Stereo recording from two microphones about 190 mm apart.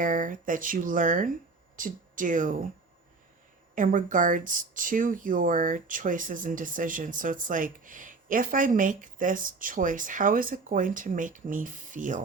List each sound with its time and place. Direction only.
0.0 s speech: 45° right (ahead or behind)
3.8 s speech: 45° right (ahead or behind)